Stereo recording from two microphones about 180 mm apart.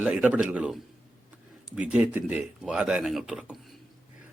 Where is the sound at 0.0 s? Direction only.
10° right (ahead or behind).